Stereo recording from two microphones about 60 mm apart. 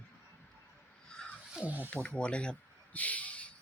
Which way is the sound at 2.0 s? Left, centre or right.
Centre.